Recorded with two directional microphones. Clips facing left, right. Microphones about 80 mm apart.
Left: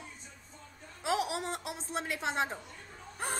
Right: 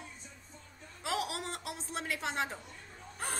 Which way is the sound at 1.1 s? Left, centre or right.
Centre.